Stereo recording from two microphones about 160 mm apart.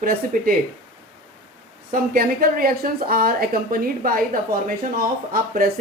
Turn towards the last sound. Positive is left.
turn(degrees=-65)  # may be behind; listen again after turning